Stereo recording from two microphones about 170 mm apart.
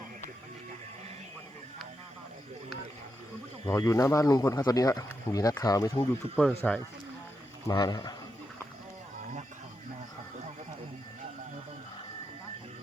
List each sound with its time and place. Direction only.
3.7 s speech: 15° left (ahead or behind)
6.3 s speech: 10° left (ahead or behind)
7.7 s speech: 25° left (ahead or behind)